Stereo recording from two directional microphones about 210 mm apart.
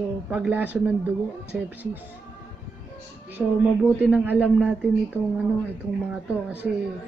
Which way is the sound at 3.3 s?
5° right (ahead or behind).